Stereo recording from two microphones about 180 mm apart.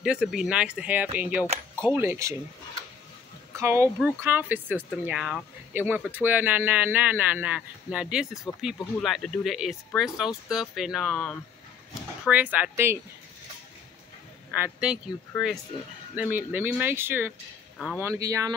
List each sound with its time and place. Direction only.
0.0 s speech: 5° right (ahead or behind)
3.5 s speech: 15° right (ahead or behind)
14.6 s speech: 5° right (ahead or behind)
16.2 s speech: 10° right (ahead or behind)